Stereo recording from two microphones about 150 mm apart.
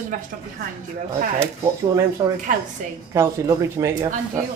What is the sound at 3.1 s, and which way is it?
Speech, 20° right (ahead or behind).